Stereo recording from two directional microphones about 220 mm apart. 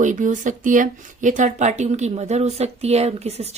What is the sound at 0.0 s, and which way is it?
Speech, 35° right (ahead or behind).